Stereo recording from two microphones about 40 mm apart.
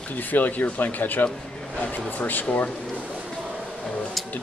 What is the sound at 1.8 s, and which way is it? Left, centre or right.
Speech, left.